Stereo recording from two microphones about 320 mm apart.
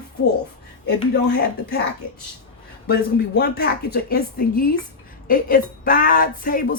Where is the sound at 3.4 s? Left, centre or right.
Left.